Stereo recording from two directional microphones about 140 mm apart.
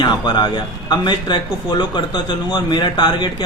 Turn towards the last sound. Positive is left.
turn(degrees=35)  # may be behind; listen again after turning